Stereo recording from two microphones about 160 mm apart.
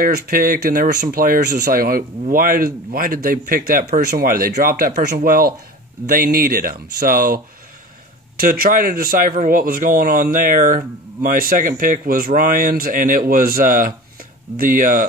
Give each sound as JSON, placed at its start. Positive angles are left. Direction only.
{"t": 0.0, "sound": "speech", "side_deg": -65}